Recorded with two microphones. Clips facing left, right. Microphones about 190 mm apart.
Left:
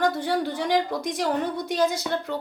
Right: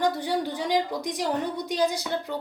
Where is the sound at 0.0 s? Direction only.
15° right (ahead or behind).